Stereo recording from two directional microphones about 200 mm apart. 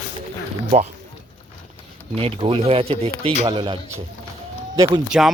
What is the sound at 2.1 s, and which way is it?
Speech, 30° right (ahead or behind).